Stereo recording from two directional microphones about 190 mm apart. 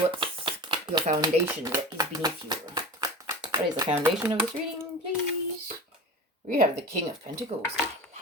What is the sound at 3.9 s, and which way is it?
Speech, 10° right (ahead or behind).